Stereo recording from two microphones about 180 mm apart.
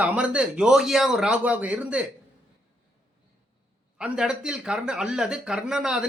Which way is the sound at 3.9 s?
5° right (ahead or behind).